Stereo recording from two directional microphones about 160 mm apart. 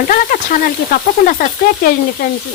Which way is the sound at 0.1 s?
60° left (ahead or behind).